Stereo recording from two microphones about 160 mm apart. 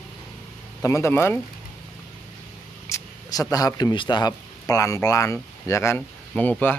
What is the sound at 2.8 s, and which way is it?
Speech, 20° left (ahead or behind).